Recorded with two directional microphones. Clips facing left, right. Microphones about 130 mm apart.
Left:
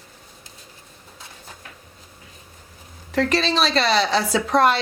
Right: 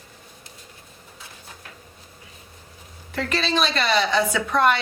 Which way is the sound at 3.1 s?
35° left (ahead or behind).